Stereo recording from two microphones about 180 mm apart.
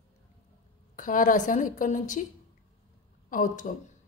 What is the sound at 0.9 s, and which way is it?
Speech, 45° left (ahead or behind).